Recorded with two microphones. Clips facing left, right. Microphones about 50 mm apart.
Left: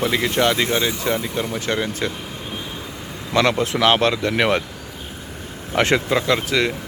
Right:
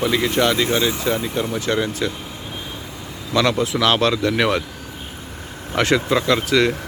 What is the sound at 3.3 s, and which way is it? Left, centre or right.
Speech, left.